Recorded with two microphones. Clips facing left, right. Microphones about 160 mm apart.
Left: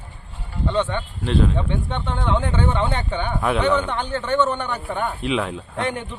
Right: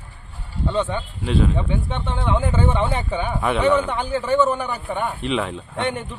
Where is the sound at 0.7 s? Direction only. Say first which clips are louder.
Even; 5° right (ahead or behind).